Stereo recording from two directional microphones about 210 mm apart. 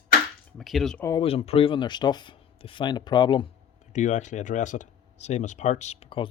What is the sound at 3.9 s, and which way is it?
Speech, 35° left (ahead or behind).